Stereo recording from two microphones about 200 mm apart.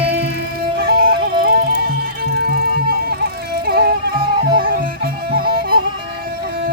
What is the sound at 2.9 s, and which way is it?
Music, 50° right (ahead or behind).